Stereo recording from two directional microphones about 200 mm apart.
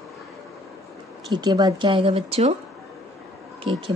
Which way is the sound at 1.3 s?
20° right (ahead or behind).